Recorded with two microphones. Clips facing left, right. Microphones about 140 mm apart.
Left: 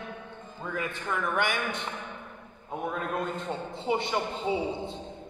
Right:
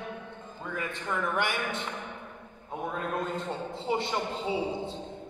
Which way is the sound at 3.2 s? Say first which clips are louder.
Even; centre (ahead or behind).